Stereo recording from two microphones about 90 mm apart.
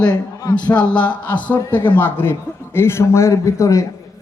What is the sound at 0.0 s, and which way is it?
A man's voice, 45° left (ahead or behind).